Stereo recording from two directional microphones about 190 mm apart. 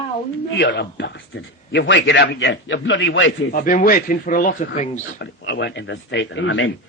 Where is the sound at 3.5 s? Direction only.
45° left (ahead or behind).